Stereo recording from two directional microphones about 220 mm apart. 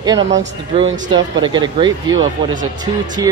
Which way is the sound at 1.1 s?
20° right (ahead or behind).